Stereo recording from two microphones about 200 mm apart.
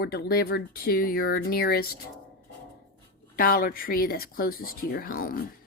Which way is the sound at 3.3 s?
45° left (ahead or behind).